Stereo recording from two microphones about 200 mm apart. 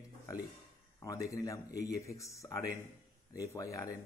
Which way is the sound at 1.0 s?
15° left (ahead or behind).